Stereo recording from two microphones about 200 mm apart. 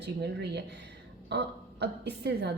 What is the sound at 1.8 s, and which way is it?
Speech, 55° right (ahead or behind).